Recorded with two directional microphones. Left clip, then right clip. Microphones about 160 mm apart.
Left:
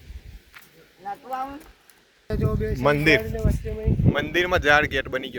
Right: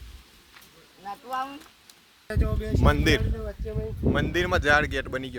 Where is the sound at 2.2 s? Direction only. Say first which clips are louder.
Left 5 dB; 10° left (ahead or behind).